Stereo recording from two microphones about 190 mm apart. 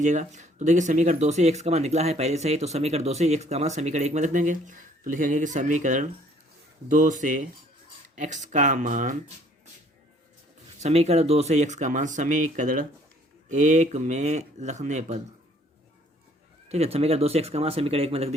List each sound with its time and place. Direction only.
0.0 s speech: 40° right (ahead or behind)
10.8 s speech: 35° right (ahead or behind)
16.6 s speech: 35° right (ahead or behind)